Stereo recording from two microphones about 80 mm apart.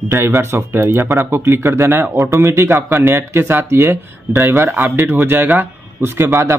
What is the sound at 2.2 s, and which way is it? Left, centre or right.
Speech, right.